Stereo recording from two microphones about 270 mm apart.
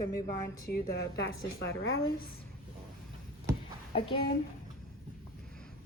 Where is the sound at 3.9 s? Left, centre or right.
Centre.